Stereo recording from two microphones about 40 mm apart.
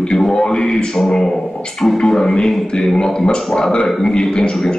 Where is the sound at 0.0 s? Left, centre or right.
Centre.